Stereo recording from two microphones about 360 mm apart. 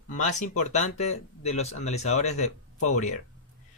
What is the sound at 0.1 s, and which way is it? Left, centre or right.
A man's voice, left.